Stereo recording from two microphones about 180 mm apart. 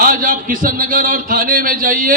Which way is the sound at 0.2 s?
50° right (ahead or behind).